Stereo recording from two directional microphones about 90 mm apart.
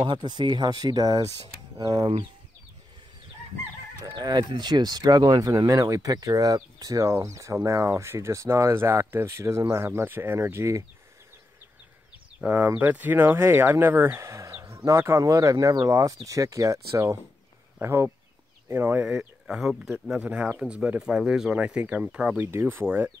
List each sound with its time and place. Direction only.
0.0 s speech: 55° right (ahead or behind)
4.0 s speech: 45° right (ahead or behind)
12.4 s speech: 20° right (ahead or behind)
19.0 s speech: 10° right (ahead or behind)
22.5 s speech: 25° right (ahead or behind)